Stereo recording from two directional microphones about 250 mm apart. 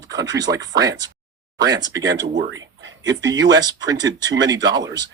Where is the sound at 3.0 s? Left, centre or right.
Centre.